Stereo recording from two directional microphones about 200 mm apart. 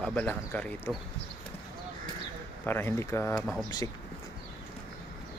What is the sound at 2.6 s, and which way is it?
Speech, 10° left (ahead or behind).